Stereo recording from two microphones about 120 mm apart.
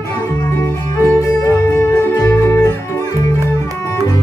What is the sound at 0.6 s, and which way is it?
Music, 25° left (ahead or behind).